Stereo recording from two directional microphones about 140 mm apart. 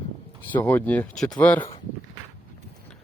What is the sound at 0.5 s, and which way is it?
Speech, 15° left (ahead or behind).